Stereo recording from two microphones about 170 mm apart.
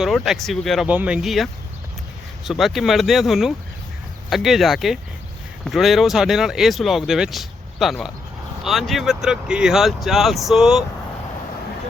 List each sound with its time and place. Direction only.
0.0 s speech: centre (ahead or behind)